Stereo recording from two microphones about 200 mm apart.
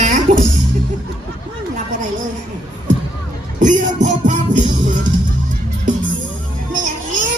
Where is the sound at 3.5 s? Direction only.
40° right (ahead or behind).